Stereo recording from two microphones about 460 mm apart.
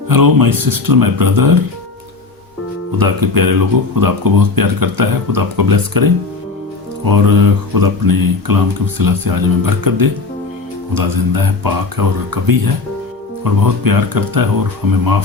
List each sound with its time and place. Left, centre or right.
0.1 s speech: right
3.0 s speech: right